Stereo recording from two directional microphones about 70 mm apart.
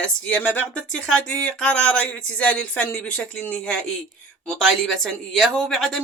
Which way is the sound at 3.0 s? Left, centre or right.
Centre.